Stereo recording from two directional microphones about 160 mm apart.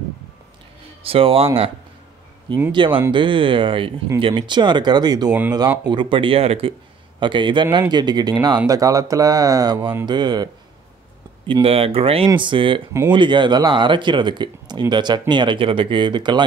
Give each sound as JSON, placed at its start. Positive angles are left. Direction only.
{"t": 1.0, "sound": "speech", "side_deg": -35}
{"t": 2.7, "sound": "speech", "side_deg": -30}